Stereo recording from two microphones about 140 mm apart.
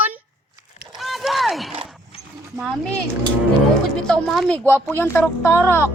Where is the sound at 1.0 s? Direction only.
Centre (ahead or behind).